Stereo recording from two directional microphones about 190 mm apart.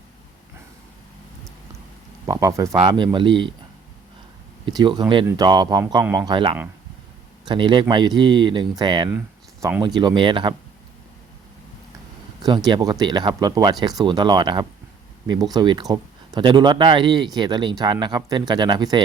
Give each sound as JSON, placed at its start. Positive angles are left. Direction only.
{"t": 2.2, "sound": "speech", "side_deg": -20}
{"t": 4.6, "sound": "speech", "side_deg": -25}
{"t": 9.1, "sound": "a sound", "side_deg": -10}
{"t": 9.8, "sound": "speech", "side_deg": -20}
{"t": 12.4, "sound": "speech", "side_deg": -20}